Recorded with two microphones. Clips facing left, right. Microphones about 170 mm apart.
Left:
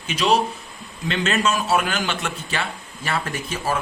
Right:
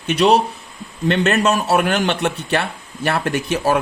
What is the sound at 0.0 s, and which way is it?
A man's voice, 65° right (ahead or behind).